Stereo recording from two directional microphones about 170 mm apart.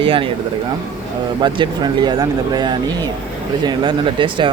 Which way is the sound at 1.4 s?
25° right (ahead or behind).